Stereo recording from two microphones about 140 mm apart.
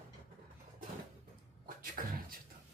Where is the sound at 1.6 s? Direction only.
85° right.